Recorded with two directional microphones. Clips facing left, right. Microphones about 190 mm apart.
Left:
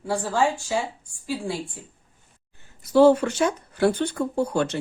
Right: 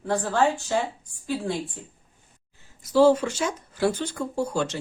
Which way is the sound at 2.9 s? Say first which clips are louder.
Left 2 dB; 55° left (ahead or behind).